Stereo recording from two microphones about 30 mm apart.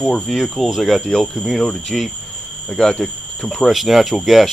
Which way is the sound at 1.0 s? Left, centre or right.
Centre.